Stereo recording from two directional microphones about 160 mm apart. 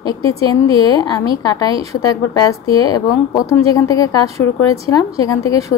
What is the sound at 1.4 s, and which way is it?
Speech, 25° left (ahead or behind).